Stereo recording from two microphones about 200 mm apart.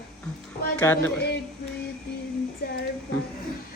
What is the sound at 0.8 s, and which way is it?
Speech, 10° left (ahead or behind).